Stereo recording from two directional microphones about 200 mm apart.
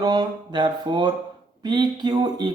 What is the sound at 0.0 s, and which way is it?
A man's voice, 20° right (ahead or behind).